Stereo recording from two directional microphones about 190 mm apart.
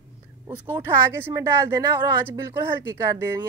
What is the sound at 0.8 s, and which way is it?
A woman's voice, 10° right (ahead or behind).